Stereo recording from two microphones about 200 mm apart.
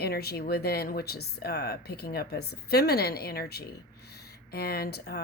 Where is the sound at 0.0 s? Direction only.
50° left (ahead or behind).